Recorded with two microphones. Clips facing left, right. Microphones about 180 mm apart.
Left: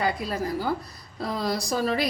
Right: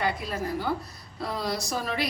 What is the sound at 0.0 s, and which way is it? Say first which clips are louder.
A woman's voice: left 2 dB; 35° left (ahead or behind).